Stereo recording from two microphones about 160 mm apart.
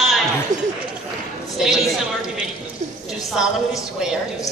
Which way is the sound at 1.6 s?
5° right (ahead or behind).